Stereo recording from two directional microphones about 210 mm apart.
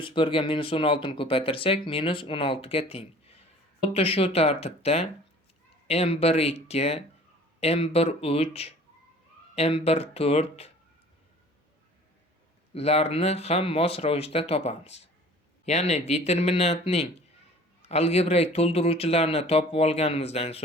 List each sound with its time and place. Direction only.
0.0 s speech: 25° left (ahead or behind)
12.7 s speech: 30° left (ahead or behind)